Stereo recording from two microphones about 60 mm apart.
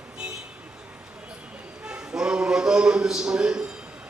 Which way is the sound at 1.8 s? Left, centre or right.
Centre.